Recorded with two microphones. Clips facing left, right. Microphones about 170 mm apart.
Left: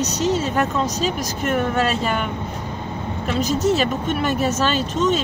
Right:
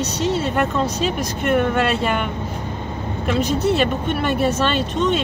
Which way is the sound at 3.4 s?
40° left (ahead or behind).